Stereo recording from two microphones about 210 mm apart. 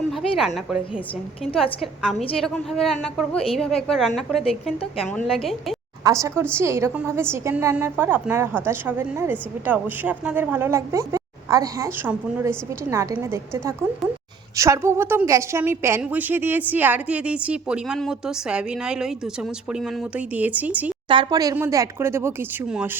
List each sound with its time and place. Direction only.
0.2 s a woman's voice: centre (ahead or behind)
1.8 s a woman's voice: 5° left (ahead or behind)
6.0 s a woman's voice: 15° right (ahead or behind)
21.1 s a woman's voice: 20° right (ahead or behind)